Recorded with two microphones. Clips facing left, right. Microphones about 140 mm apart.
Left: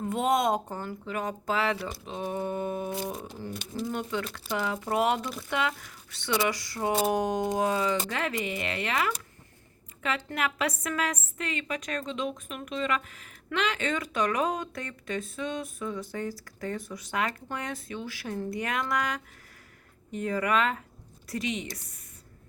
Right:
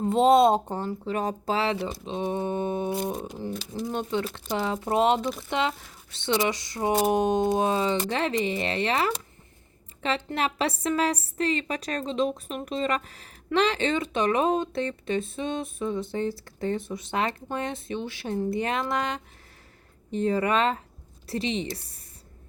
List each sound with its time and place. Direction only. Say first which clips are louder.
0.0 s a woman's voice: right 7 dB; 30° right (ahead or behind)